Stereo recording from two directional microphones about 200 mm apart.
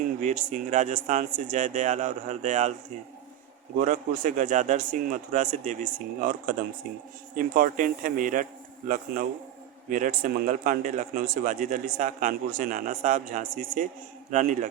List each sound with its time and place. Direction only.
0.2 s a man's voice: 40° right (ahead or behind)
3.8 s a man's voice: 40° right (ahead or behind)
9.9 s a man's voice: 45° right (ahead or behind)